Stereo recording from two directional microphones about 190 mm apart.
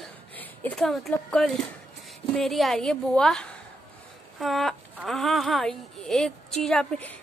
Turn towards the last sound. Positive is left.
turn(degrees=5)  # may be behind; listen again after turning